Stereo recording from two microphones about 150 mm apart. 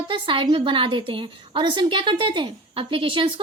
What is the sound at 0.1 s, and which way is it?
Speech, 35° right (ahead or behind).